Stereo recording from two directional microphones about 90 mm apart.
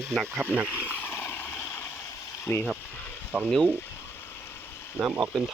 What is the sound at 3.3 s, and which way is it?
Speech, 15° right (ahead or behind).